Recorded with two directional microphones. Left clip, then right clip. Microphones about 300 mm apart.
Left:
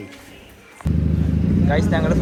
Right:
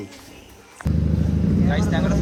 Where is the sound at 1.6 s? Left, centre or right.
Centre.